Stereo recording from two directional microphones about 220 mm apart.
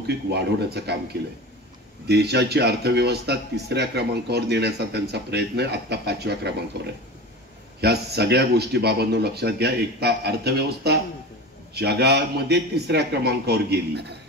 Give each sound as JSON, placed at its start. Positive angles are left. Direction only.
{"t": 0.0, "sound": "speech", "side_deg": -50}